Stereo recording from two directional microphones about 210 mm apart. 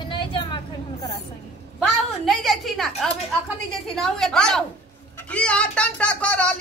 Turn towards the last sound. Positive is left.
turn(degrees=5)  # may be behind; listen again after turning